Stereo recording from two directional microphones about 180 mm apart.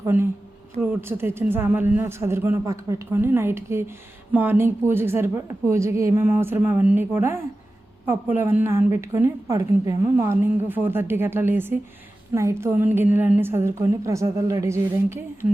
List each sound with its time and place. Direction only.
0.0 s a woman's voice: 15° right (ahead or behind)